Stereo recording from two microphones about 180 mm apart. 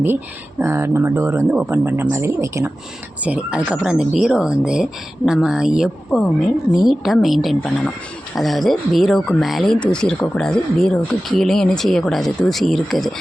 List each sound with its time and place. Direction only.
0.6 s speech: 15° right (ahead or behind); by 13.1 s centre (ahead or behind)